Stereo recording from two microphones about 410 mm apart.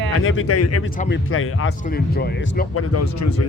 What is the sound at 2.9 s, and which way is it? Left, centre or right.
Speech, left.